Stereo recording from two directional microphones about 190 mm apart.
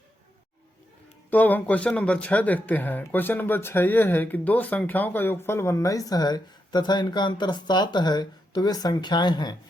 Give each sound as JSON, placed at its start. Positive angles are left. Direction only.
{"t": 1.3, "sound": "speech", "side_deg": 10}